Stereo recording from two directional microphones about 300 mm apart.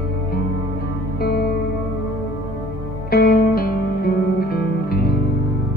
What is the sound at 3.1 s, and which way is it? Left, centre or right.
Music, left.